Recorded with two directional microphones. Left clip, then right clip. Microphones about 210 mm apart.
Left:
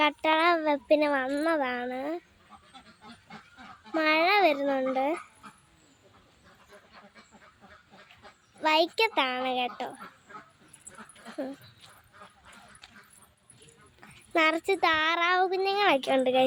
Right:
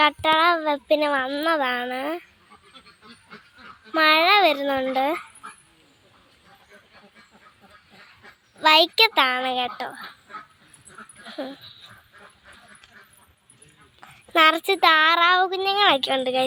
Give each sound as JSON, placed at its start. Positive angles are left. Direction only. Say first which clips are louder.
{"t": 0.0, "sound": "speech", "louder": "right 6 dB", "side_deg": 5}
{"t": 3.3, "sound": "a sound", "louder": "right 4 dB", "side_deg": 60}
{"t": 3.9, "sound": "speech", "louder": "right 7 dB", "side_deg": 0}
{"t": 8.6, "sound": "speech", "louder": "right 8 dB", "side_deg": -5}
{"t": 11.0, "sound": "dog", "louder": "right 6 dB", "side_deg": -45}
{"t": 14.0, "sound": "speech", "louder": "right 8 dB", "side_deg": 5}
{"t": 15.4, "sound": "speech", "louder": "right 5 dB", "side_deg": 5}